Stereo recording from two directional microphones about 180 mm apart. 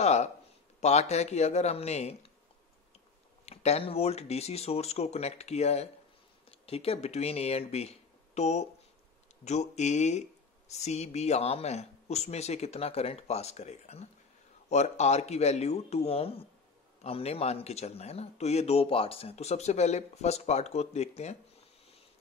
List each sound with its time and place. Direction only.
0.0 s a sound: 40° left (ahead or behind)
0.7 s speech: 40° left (ahead or behind)
3.4 s speech: 35° left (ahead or behind)